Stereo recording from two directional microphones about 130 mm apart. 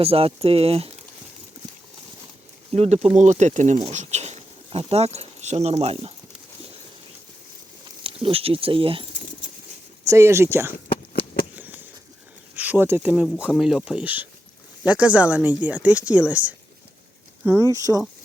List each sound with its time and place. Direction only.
0.0 s speech: 45° right (ahead or behind)
2.7 s speech: 55° right (ahead or behind)
8.0 s speech: 45° right (ahead or behind)
10.1 s speech: 20° right (ahead or behind)
11.5 s a sound: 15° right (ahead or behind)
12.5 s speech: 15° right (ahead or behind)
17.7 s speech: 25° right (ahead or behind)